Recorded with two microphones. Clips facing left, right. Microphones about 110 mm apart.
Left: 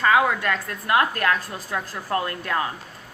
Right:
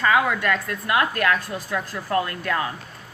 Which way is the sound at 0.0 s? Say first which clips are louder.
Left 1 dB; 35° left (ahead or behind).